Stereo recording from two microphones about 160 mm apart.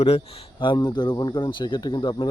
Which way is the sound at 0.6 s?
30° left (ahead or behind).